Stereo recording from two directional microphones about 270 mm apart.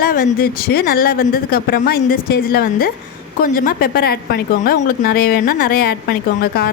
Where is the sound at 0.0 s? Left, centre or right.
Left.